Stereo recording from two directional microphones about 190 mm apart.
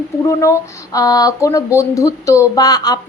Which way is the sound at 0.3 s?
15° left (ahead or behind).